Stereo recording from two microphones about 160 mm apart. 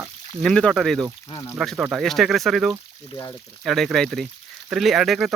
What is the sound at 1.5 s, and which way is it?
Speech, 5° right (ahead or behind).